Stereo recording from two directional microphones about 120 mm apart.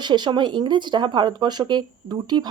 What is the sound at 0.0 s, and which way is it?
A woman's voice, 40° right (ahead or behind).